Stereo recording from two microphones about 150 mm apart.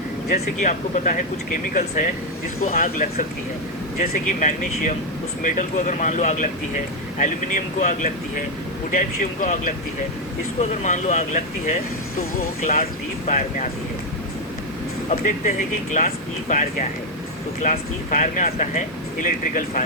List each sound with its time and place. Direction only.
0.6 s speech: 60° left (ahead or behind)
4.0 s speech: 70° left (ahead or behind); by 11.8 s 55° left (ahead or behind)
12.4 s speech: 75° left (ahead or behind); by 13.7 s 60° left (ahead or behind)
15.1 s speech: 60° left (ahead or behind)